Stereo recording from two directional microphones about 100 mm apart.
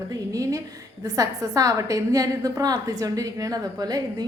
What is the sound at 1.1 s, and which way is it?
A woman's voice, 35° right (ahead or behind).